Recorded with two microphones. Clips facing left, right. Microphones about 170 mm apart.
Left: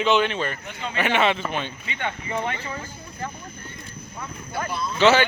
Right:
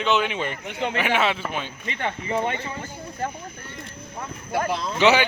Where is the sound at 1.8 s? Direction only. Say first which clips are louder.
Right 2 dB; 35° right (ahead or behind).